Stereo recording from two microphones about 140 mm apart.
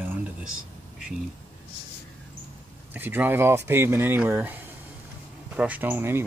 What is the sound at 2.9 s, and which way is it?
Speech, 15° right (ahead or behind).